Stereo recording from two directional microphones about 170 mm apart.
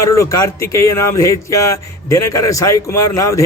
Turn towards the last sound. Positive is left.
turn(degrees=20)  # may be behind; listen again after turning